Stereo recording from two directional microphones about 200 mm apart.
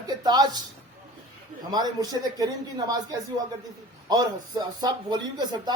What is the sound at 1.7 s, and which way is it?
Speech, 20° right (ahead or behind).